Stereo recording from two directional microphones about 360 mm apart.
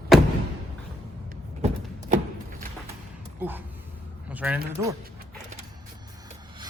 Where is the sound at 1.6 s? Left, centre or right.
Centre.